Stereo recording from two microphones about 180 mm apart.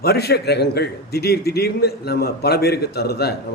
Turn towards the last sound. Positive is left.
turn(degrees=60)  # may be behind; listen again after turning